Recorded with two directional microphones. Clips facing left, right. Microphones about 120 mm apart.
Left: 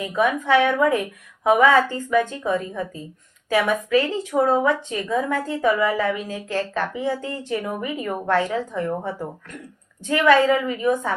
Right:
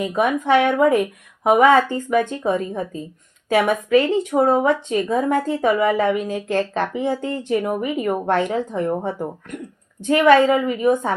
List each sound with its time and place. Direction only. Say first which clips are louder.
0.0 s a woman's voice: right 2 dB; 20° right (ahead or behind)